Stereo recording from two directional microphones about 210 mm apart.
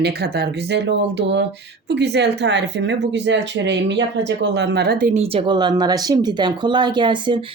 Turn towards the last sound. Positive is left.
turn(degrees=-25)  # may be behind; listen again after turning